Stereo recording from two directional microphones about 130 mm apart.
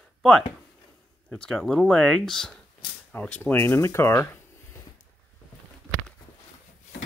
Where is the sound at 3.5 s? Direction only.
20° left (ahead or behind).